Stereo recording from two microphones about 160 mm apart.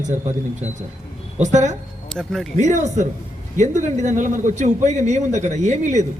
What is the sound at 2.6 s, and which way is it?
A man's voice, 50° right (ahead or behind).